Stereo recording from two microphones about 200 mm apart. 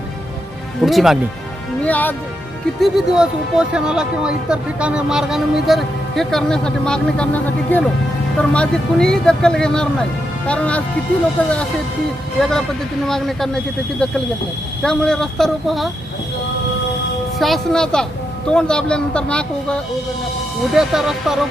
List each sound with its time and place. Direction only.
0.8 s speech: centre (ahead or behind)
12.4 s speech: centre (ahead or behind)
17.3 s speech: centre (ahead or behind)